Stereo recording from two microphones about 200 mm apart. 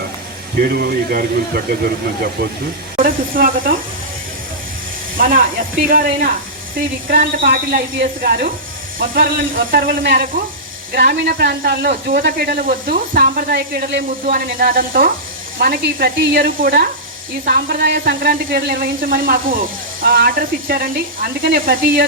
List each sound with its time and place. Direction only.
0.6 s speech: 50° right (ahead or behind)
5.1 s speech: 45° right (ahead or behind)